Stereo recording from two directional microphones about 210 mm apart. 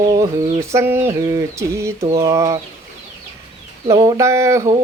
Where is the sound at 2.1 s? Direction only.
15° right (ahead or behind).